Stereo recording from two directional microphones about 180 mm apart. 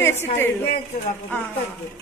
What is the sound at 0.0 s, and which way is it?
Speech, 15° left (ahead or behind).